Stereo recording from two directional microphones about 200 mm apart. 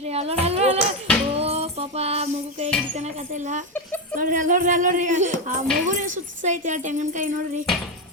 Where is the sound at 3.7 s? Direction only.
10° left (ahead or behind).